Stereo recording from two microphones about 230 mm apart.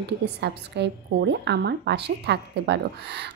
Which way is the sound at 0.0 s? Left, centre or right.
Right.